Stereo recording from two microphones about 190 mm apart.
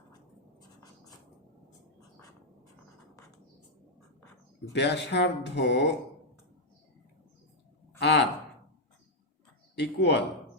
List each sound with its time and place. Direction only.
4.7 s speech: 65° left (ahead or behind)
7.9 s a sound: 60° left (ahead or behind)
9.7 s speech: 65° left (ahead or behind)